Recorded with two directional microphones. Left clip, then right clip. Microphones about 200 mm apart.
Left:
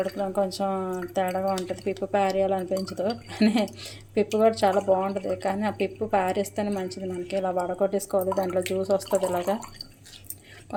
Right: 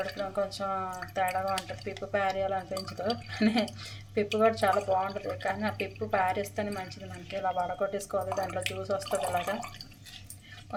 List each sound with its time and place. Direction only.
0.3 s a woman's voice: 35° left (ahead or behind)